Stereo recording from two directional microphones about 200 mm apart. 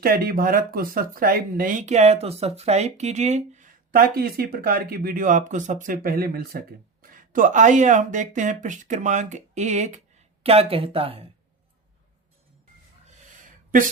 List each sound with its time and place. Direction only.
0.0 s speech: 45° right (ahead or behind); by 11.2 s 30° right (ahead or behind)